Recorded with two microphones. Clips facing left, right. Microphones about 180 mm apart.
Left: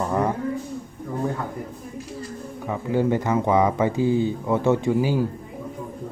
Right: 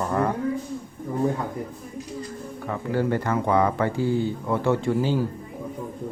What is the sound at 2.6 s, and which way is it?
Speech, 15° left (ahead or behind).